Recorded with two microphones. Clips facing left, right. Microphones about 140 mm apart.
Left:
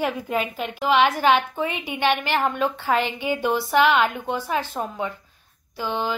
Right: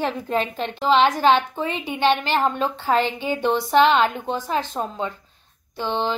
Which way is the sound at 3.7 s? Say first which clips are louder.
Right 2 dB; 20° right (ahead or behind).